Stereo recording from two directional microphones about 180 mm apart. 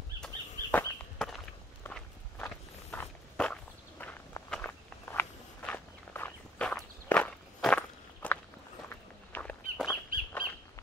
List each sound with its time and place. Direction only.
0.2 s walk: 5° left (ahead or behind)
10.4 s bird: 55° right (ahead or behind)